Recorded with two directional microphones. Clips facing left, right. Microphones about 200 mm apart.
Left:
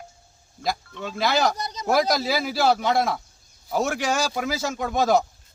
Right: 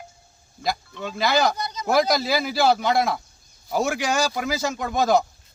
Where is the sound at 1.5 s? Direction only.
40° left (ahead or behind).